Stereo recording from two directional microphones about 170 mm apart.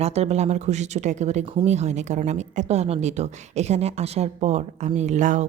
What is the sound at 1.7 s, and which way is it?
A woman's voice, 40° right (ahead or behind).